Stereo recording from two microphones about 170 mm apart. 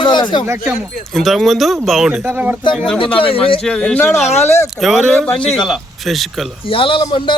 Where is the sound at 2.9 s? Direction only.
30° left (ahead or behind).